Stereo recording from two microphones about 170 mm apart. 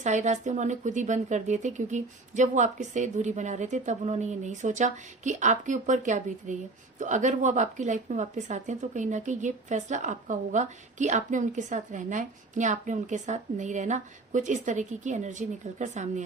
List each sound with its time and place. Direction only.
0.0 s speech: 45° right (ahead or behind)